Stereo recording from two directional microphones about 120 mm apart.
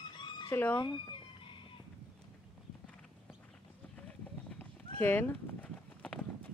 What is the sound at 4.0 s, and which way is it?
Clip-clop, 10° left (ahead or behind).